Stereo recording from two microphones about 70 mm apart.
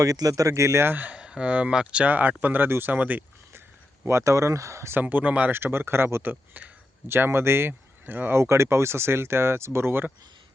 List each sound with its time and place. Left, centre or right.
0.0 s speech: right
1.1 s speech: centre
4.0 s speech: right
4.9 s speech: right
5.5 s speech: right
6.2 s speech: right
7.1 s speech: right
8.4 s speech: right